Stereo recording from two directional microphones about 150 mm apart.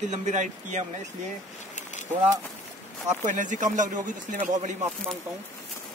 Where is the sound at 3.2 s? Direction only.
55° right (ahead or behind).